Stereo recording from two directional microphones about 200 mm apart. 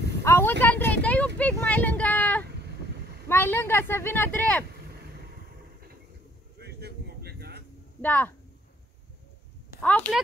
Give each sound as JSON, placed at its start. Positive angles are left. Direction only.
{"t": 0.2, "sound": "vehicle", "side_deg": 10}
{"t": 3.3, "sound": "speech", "side_deg": 10}
{"t": 6.6, "sound": "a sound", "side_deg": -55}
{"t": 8.0, "sound": "speech", "side_deg": 10}
{"t": 9.8, "sound": "speech", "side_deg": 5}